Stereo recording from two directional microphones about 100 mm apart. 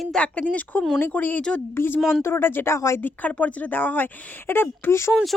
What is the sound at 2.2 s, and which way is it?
Speech, 25° left (ahead or behind).